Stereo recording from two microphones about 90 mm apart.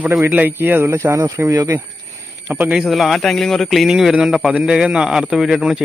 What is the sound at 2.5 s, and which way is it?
Speech, 20° right (ahead or behind).